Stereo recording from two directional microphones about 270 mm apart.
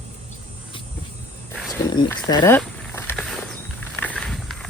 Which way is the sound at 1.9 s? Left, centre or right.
Centre.